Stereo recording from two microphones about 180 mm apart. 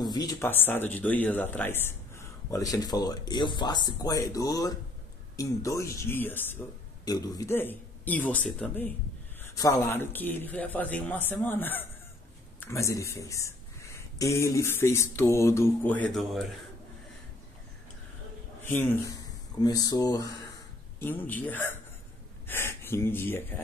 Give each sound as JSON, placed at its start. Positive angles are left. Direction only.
{"t": 0.0, "sound": "speech", "side_deg": 20}
{"t": 9.4, "sound": "speech", "side_deg": 20}
{"t": 18.6, "sound": "speech", "side_deg": 10}